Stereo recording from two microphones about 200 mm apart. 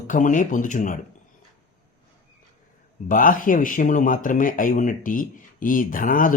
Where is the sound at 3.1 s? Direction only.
45° left (ahead or behind).